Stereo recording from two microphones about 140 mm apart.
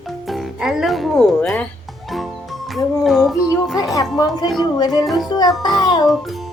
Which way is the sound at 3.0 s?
Centre (ahead or behind).